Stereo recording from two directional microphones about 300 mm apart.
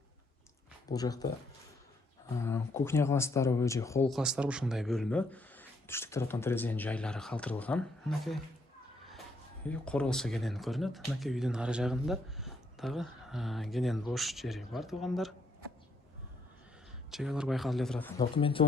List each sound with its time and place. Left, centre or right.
0.9 s speech: centre
2.3 s speech: centre
9.6 s speech: centre
17.1 s speech: centre
18.2 s speech: centre